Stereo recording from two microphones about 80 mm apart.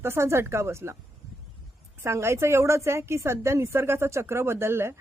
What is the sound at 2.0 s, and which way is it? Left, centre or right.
Speech, right.